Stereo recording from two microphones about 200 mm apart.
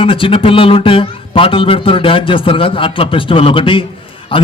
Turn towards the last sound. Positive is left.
turn(degrees=25)  # may be behind; listen again after turning